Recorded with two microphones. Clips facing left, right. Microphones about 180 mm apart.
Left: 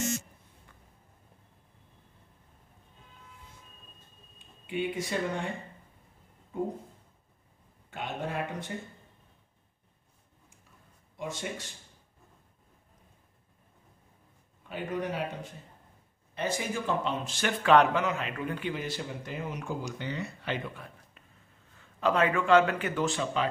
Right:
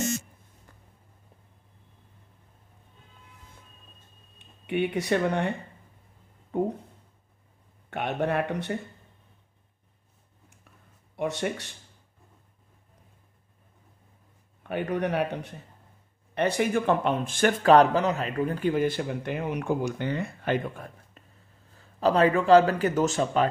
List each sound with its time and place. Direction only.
4.4 s speech: 65° right (ahead or behind)
6.5 s speech: 65° right (ahead or behind)
7.9 s a man's voice: 65° right (ahead or behind)
11.1 s a man's voice: 65° right (ahead or behind)
14.6 s a man's voice: 65° right (ahead or behind); by 23.5 s 45° right (ahead or behind)